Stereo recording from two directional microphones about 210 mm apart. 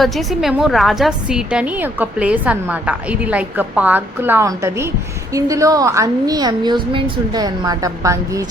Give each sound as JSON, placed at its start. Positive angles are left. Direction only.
{"t": 0.0, "sound": "a woman's voice", "side_deg": 0}